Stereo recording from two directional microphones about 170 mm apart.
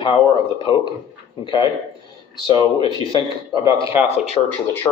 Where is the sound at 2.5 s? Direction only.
25° right (ahead or behind).